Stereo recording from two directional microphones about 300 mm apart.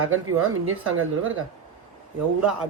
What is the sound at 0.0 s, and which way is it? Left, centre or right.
A woman's voice, right.